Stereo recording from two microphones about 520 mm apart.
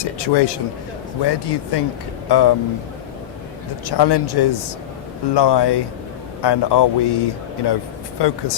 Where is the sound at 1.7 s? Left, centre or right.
Left.